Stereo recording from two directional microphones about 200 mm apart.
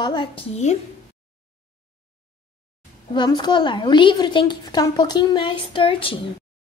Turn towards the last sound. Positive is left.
turn(degrees=25)  # may be behind; listen again after turning